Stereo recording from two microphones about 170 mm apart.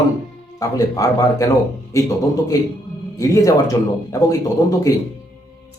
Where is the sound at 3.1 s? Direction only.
20° left (ahead or behind).